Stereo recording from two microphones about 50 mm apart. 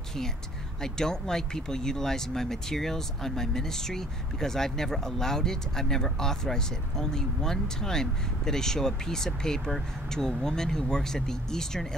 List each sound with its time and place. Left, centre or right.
0.9 s speech: centre